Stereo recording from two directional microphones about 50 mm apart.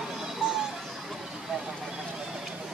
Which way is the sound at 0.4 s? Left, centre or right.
Centre.